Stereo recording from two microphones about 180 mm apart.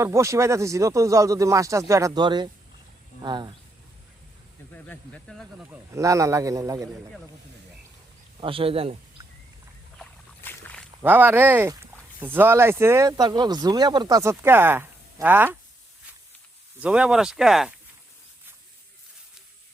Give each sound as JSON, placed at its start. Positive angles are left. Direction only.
{"t": 0.0, "sound": "speech", "side_deg": -15}
{"t": 4.7, "sound": "speech", "side_deg": 10}
{"t": 5.7, "sound": "speech", "side_deg": -15}
{"t": 8.4, "sound": "speech", "side_deg": -30}
{"t": 10.0, "sound": "boat", "side_deg": 10}
{"t": 11.0, "sound": "speech", "side_deg": -10}
{"t": 16.8, "sound": "speech", "side_deg": -5}